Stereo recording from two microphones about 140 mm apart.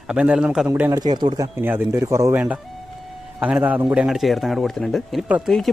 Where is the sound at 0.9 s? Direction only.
30° right (ahead or behind); by 5.5 s 10° right (ahead or behind).